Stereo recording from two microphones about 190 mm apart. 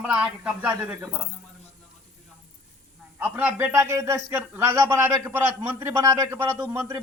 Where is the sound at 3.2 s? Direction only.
10° right (ahead or behind).